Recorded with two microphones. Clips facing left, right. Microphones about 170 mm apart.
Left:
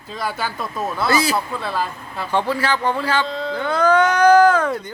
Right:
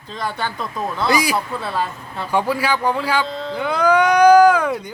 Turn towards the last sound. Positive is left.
turn(degrees=-10)  # may be behind; listen again after turning